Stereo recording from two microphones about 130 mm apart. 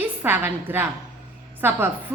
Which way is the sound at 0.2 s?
15° right (ahead or behind).